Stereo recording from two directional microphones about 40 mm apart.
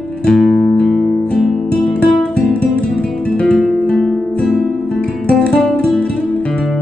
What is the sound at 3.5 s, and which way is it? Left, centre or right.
Music, centre.